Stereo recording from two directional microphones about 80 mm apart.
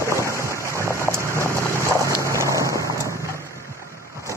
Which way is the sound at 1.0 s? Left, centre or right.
Left.